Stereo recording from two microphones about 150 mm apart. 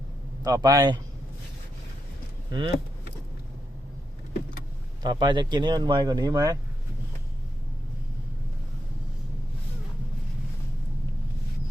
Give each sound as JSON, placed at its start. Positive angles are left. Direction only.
{"t": 0.4, "sound": "speech", "side_deg": -25}
{"t": 2.5, "sound": "speech", "side_deg": -35}
{"t": 5.0, "sound": "speech", "side_deg": -30}